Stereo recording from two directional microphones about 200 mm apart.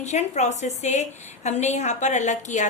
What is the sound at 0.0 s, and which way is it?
A woman's voice, 35° left (ahead or behind).